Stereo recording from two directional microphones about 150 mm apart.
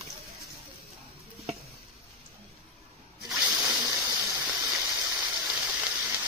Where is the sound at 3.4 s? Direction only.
10° right (ahead or behind).